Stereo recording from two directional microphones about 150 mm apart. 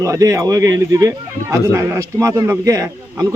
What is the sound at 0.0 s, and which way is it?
A man's voice, 20° right (ahead or behind).